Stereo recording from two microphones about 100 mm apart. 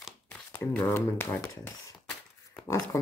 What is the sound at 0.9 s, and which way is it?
Speech, 25° left (ahead or behind).